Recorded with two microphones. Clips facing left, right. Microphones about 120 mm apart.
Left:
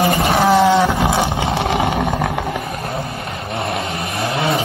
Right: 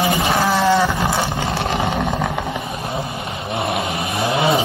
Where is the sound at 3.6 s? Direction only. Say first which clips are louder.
Right 1 dB; 5° right (ahead or behind).